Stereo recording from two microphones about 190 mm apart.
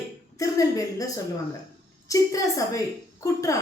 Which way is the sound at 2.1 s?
15° left (ahead or behind).